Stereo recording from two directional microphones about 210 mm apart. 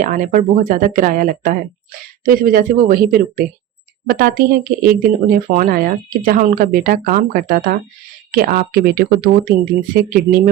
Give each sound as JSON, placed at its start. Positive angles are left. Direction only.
{"t": 0.0, "sound": "speech", "side_deg": -40}